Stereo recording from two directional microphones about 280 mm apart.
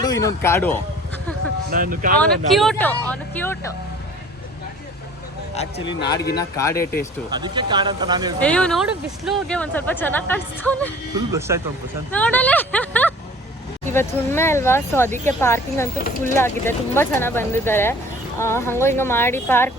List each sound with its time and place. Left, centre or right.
0.0 s speech: centre
1.7 s speech: right
2.5 s speech: centre
5.5 s speech: centre
7.3 s speech: centre
8.4 s speech: centre
11.1 s speech: centre
12.1 s speech: centre